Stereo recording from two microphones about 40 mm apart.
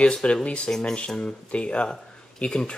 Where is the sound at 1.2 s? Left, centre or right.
Left.